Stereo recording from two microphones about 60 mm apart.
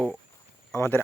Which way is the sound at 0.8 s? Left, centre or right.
Left.